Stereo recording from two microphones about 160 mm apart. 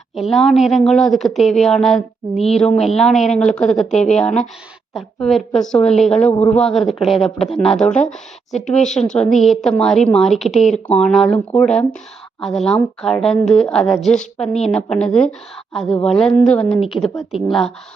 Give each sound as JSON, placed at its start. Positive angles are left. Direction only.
{"t": 0.2, "sound": "speech", "side_deg": 0}
{"t": 3.9, "sound": "speech", "side_deg": 45}
{"t": 4.2, "sound": "speech", "side_deg": 5}